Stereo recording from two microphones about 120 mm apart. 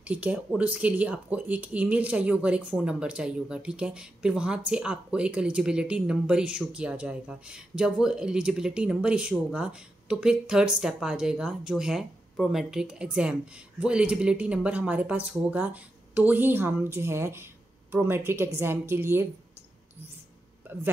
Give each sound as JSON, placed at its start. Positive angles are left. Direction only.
{"t": 0.0, "sound": "speech", "side_deg": -10}